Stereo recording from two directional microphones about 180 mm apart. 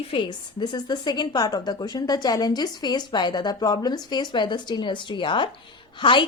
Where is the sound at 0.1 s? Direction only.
25° left (ahead or behind).